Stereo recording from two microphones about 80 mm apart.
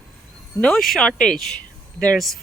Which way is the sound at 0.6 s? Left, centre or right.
Centre.